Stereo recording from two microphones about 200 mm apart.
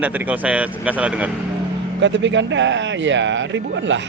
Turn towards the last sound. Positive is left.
turn(degrees=-65)  # may be behind; listen again after turning